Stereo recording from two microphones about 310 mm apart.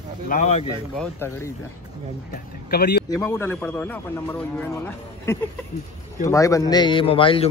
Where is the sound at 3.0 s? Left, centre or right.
Centre.